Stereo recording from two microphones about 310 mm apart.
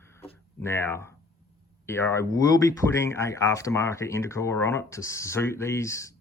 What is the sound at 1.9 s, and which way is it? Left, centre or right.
Speech, centre.